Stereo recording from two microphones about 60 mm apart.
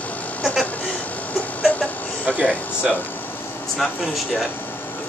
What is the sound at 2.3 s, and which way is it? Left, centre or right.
Speech, right.